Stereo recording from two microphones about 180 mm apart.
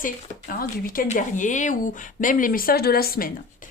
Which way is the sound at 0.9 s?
40° left (ahead or behind).